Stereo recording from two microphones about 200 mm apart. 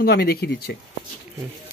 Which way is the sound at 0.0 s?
50° left (ahead or behind).